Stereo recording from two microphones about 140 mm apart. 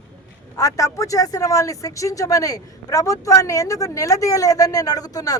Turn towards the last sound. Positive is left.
turn(degrees=25)  # may be behind; listen again after turning